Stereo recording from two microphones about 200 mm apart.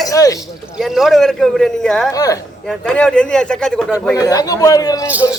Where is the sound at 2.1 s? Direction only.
15° left (ahead or behind).